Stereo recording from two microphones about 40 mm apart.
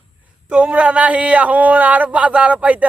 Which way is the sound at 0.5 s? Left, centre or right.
Right.